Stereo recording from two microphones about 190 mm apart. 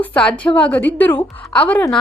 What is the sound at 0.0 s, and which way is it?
A woman's voice, 5° left (ahead or behind).